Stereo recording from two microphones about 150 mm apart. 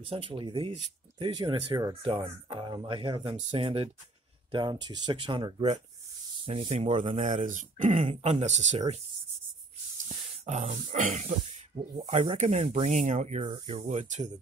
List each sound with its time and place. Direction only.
0.0 s speech: 35° right (ahead or behind)
2.0 s speech: 40° right (ahead or behind)
7.2 s speech: 55° right (ahead or behind)
10.0 s speech: 50° right (ahead or behind)
12.4 s speech: 50° right (ahead or behind)
13.4 s speech: 40° right (ahead or behind)